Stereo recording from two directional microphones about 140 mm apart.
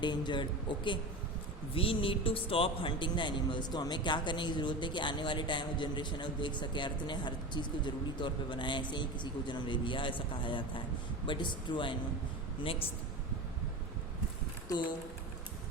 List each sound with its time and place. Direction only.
0.0 s a man's voice: 35° left (ahead or behind)